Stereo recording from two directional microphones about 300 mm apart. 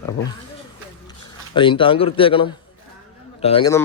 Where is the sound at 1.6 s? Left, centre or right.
Centre.